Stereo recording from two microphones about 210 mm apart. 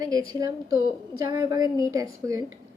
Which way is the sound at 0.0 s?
15° right (ahead or behind).